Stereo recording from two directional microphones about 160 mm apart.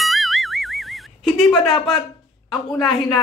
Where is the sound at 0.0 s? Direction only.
Centre (ahead or behind).